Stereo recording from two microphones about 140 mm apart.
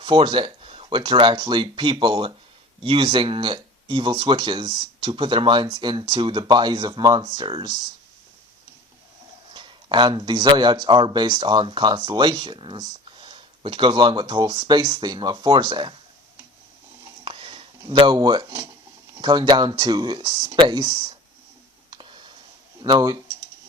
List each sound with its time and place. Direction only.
0.0 s speech: 35° right (ahead or behind)
9.5 s speech: 35° right (ahead or behind)
17.2 s a sound: 40° right (ahead or behind)
18.4 s speech: 15° right (ahead or behind)
19.2 s speech: 30° right (ahead or behind)
21.8 s clicking: 35° right (ahead or behind)
22.8 s speech: 25° right (ahead or behind)